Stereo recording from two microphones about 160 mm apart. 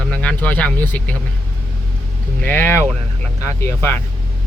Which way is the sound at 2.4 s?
10° left (ahead or behind).